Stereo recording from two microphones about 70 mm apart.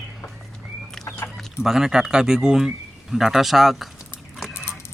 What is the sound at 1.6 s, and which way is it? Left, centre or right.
Speech, centre.